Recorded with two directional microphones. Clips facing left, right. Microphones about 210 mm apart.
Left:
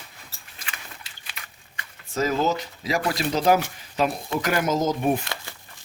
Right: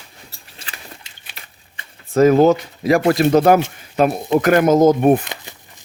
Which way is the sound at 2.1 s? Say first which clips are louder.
Right 12 dB; 55° right (ahead or behind).